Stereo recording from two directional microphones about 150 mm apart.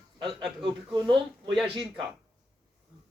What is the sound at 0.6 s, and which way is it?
Speech, 30° right (ahead or behind).